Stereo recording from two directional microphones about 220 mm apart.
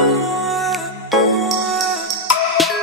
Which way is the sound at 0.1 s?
Centre (ahead or behind).